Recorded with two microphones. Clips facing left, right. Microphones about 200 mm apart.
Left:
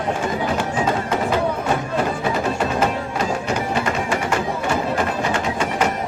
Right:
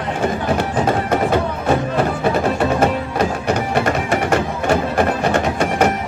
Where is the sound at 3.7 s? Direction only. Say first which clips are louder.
Right 4 dB; 55° right (ahead or behind).